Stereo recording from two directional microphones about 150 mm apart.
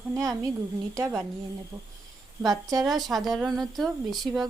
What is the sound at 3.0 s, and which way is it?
A woman's voice, centre (ahead or behind).